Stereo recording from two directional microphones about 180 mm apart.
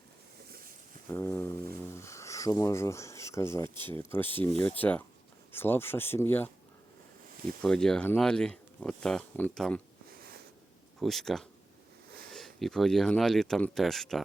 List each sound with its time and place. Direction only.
1.0 s speech: 15° left (ahead or behind)
7.6 s speech: 5° left (ahead or behind)
11.0 s speech: centre (ahead or behind)